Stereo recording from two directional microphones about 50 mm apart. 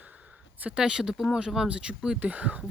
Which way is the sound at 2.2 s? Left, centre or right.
Right.